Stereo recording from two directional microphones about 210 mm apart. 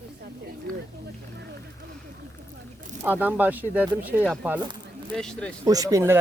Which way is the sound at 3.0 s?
10° right (ahead or behind).